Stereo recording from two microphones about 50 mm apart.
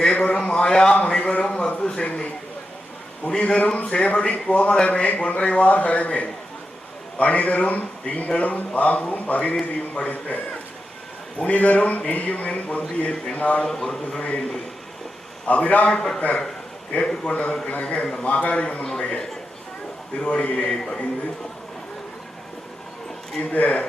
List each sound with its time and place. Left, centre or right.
0.0 s a sound: left
1.8 s speech: centre
3.2 s speech: centre
13.7 s a man's voice: centre
14.2 s speech: left
15.4 s speech: left
15.9 s a man's voice: centre
17.7 s a man's voice: left
20.2 s speech: left
23.4 s speech: left